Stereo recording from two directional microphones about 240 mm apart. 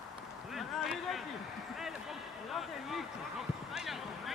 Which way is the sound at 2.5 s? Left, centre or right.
Centre.